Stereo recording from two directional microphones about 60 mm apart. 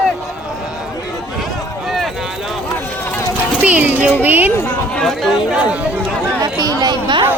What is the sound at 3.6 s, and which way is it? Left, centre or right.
Speech, right.